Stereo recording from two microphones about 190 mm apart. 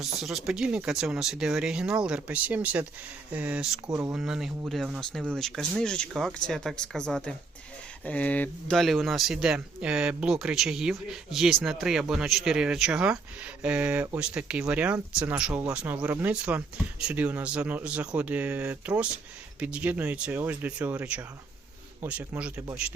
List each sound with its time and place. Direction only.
0.0 s speech: centre (ahead or behind)
4.1 s speech: 5° right (ahead or behind)